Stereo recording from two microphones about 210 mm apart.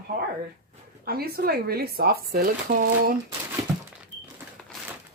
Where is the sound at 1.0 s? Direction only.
45° right (ahead or behind).